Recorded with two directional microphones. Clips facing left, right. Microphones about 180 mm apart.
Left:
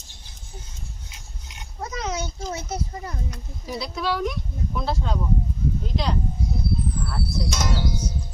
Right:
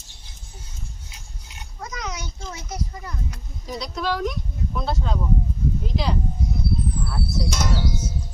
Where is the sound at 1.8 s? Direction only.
30° left (ahead or behind).